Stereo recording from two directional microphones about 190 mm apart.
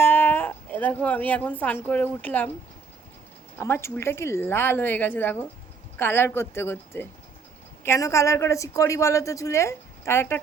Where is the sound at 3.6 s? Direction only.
15° left (ahead or behind).